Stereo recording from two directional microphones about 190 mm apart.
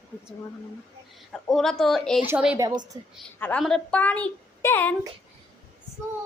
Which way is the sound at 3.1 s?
5° left (ahead or behind).